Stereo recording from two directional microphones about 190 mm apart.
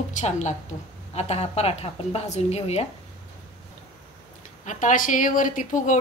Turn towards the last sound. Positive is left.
turn(degrees=45)  # may be behind; listen again after turning